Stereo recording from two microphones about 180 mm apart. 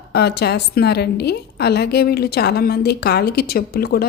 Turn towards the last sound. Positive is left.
turn(degrees=60)  # may be behind; listen again after turning